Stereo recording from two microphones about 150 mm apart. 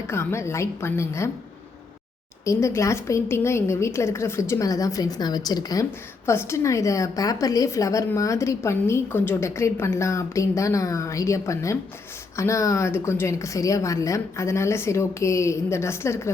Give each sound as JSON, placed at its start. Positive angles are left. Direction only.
{"t": 0.1, "sound": "a woman's voice", "side_deg": 15}
{"t": 2.4, "sound": "a woman's voice", "side_deg": 20}